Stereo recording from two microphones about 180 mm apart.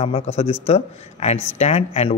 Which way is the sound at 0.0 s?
35° left (ahead or behind).